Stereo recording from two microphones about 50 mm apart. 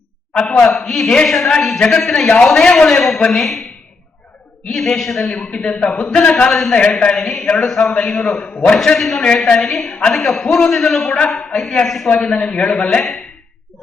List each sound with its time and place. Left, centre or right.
0.6 s a man's voice: centre
4.7 s a man's voice: centre
5.4 s a man's voice: left
6.5 s a man's voice: centre
6.7 s a man's voice: centre
12.0 s a man's voice: centre